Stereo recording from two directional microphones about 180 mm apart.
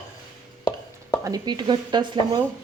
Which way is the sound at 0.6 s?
20° left (ahead or behind).